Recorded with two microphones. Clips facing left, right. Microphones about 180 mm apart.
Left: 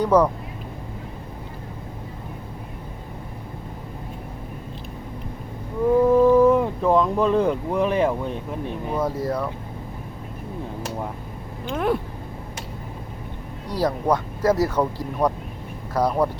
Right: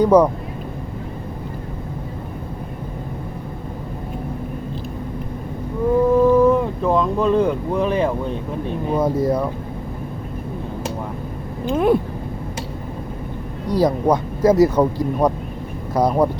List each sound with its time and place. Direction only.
0.0 s speech: 15° right (ahead or behind)
6.2 s speech: 10° left (ahead or behind)
9.0 s speech: 15° right (ahead or behind)
11.7 s speech: 15° right (ahead or behind)
13.7 s speech: 15° right (ahead or behind)